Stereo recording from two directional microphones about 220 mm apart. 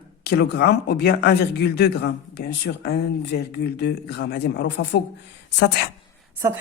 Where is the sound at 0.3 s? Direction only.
50° left (ahead or behind).